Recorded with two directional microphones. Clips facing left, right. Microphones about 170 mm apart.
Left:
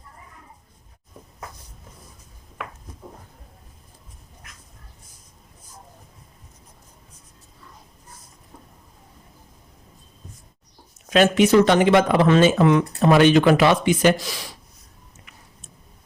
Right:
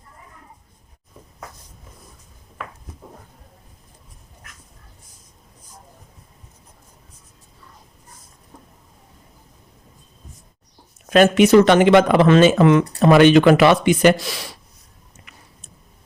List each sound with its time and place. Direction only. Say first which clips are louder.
11.1 s speech: right 3 dB; 50° right (ahead or behind)
11.4 s speech: right 3 dB; 75° right (ahead or behind)
15.3 s a sound: right 3 dB; 75° right (ahead or behind)